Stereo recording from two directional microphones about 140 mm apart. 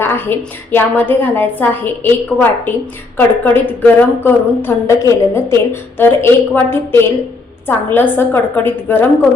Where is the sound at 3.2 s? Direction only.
15° left (ahead or behind).